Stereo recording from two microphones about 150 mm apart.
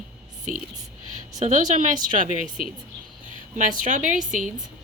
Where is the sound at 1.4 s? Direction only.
55° right (ahead or behind).